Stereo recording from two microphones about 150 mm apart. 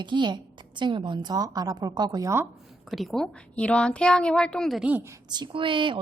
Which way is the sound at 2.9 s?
Centre (ahead or behind).